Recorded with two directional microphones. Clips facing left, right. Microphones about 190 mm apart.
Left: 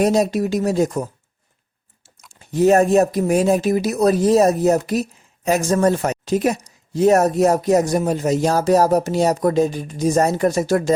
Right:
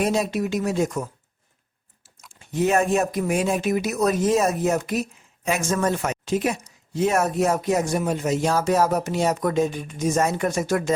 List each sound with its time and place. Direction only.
0.0 s speech: 40° left (ahead or behind)
2.3 s speech: 40° left (ahead or behind)